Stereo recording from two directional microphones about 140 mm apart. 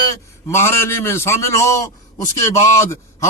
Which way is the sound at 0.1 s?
20° left (ahead or behind).